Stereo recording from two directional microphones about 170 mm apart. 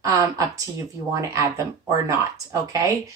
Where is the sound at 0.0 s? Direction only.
20° right (ahead or behind).